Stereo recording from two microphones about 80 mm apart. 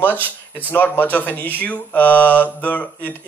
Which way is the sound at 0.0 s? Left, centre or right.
Left.